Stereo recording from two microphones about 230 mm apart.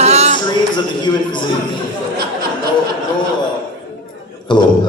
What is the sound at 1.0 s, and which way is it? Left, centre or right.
Speech, centre.